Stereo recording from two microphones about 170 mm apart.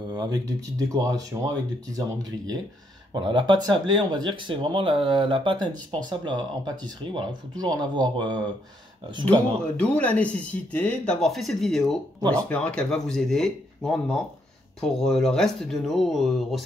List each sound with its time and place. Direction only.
0.1 s speech: 25° right (ahead or behind)
3.1 s speech: 30° right (ahead or behind)
9.2 s speech: 10° left (ahead or behind)